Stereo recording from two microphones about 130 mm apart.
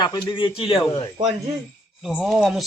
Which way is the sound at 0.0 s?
35° left (ahead or behind).